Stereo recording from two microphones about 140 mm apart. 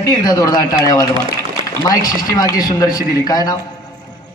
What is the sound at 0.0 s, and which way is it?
Speech, 25° left (ahead or behind).